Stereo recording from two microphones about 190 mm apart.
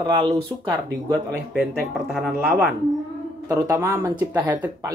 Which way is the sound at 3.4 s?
15° right (ahead or behind).